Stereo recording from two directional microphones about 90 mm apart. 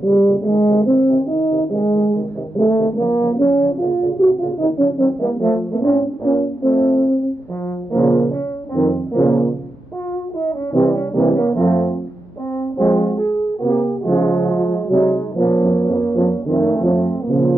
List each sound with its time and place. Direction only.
0.1 s french horn: 30° left (ahead or behind)
2.6 s brass instrument: 30° left (ahead or behind)
10.4 s french horn: 30° left (ahead or behind)
12.7 s brass instrument: 30° left (ahead or behind)